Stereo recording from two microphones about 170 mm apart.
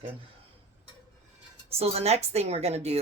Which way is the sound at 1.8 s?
35° right (ahead or behind).